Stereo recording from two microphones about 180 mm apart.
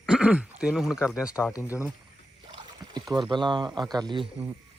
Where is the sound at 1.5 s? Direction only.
15° left (ahead or behind).